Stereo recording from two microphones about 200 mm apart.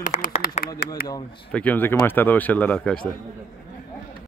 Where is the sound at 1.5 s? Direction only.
10° left (ahead or behind).